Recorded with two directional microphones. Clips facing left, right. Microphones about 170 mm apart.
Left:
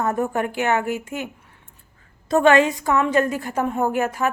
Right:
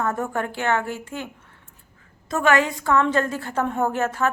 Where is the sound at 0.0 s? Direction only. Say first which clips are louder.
Left 3 dB; 20° left (ahead or behind).